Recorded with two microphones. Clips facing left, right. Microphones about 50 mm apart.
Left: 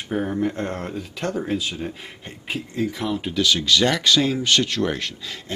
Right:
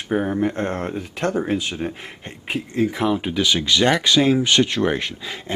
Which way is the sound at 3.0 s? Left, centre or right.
Right.